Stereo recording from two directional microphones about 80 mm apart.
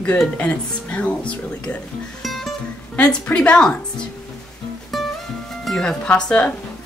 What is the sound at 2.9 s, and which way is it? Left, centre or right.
Speech, centre.